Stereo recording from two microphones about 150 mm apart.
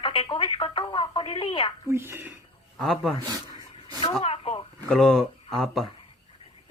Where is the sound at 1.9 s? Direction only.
15° right (ahead or behind).